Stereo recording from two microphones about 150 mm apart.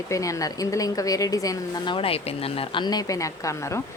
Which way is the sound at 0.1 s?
20° left (ahead or behind).